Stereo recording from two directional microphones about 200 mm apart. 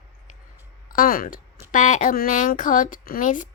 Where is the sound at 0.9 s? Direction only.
45° left (ahead or behind).